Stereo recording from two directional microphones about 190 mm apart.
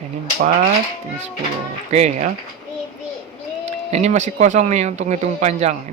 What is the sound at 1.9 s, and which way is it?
Speech, 35° right (ahead or behind).